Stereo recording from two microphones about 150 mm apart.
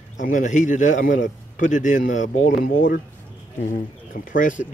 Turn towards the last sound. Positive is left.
turn(degrees=60)  # may be behind; listen again after turning